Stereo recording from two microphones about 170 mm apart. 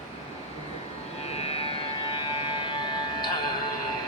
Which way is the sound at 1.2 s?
35° left (ahead or behind).